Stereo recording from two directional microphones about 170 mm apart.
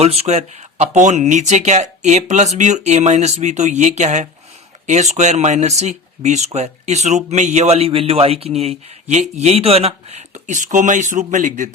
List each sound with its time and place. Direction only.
0.0 s a man's voice: 35° right (ahead or behind)